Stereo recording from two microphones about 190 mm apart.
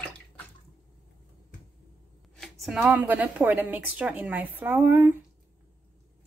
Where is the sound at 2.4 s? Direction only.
Centre (ahead or behind).